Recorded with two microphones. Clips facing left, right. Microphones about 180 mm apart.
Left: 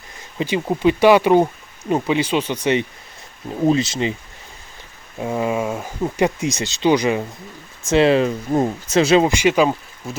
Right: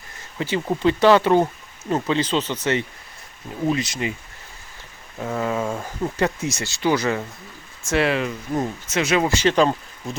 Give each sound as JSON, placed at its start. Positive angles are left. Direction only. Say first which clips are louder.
{"t": 0.3, "sound": "speech", "louder": "left 3 dB", "side_deg": 15}
{"t": 3.5, "sound": "speech", "louder": "left 6 dB", "side_deg": 30}
{"t": 5.2, "sound": "speech", "louder": "left 3 dB", "side_deg": 15}
{"t": 9.2, "sound": "speech", "louder": "left 2 dB", "side_deg": 10}